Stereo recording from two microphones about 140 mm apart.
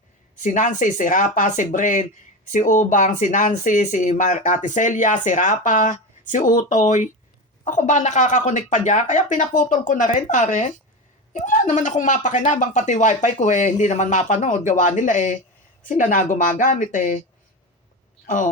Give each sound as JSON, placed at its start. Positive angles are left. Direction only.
{"t": 0.4, "sound": "speech", "side_deg": 65}
{"t": 18.3, "sound": "speech", "side_deg": 65}